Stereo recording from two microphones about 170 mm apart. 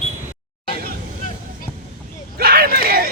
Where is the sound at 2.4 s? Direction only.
65° right (ahead or behind).